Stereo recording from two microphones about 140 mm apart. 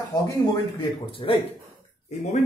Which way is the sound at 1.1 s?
40° left (ahead or behind).